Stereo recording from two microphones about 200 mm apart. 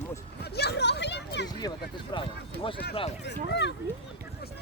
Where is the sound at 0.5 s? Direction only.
55° left (ahead or behind).